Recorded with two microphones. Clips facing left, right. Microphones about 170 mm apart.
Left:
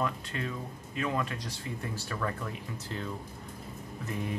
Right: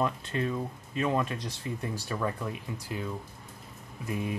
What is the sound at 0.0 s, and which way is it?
Speech, 20° right (ahead or behind).